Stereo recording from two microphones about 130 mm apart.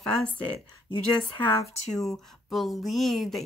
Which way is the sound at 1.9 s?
Centre (ahead or behind).